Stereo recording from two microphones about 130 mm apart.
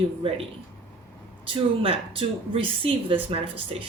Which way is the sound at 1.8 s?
45° right (ahead or behind).